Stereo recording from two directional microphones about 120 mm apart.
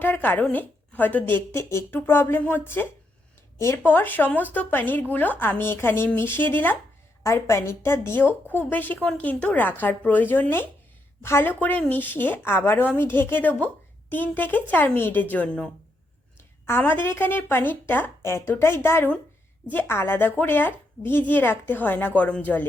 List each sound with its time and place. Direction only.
0.0 s a woman's voice: 15° left (ahead or behind)